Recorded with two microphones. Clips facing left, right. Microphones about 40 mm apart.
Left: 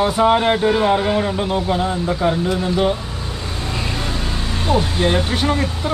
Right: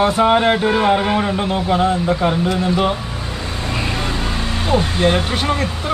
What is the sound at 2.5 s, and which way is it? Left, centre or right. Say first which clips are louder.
Vehicle: right 1 dB; centre.